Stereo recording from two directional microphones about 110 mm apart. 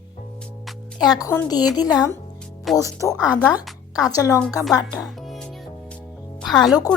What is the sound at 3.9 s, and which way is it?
Speech, 35° left (ahead or behind).